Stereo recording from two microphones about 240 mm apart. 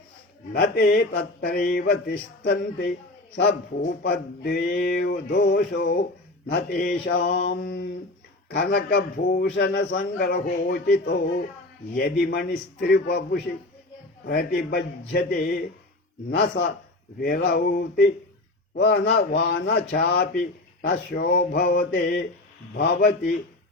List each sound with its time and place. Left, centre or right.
0.5 s a man's voice: left
12.2 s a man's voice: left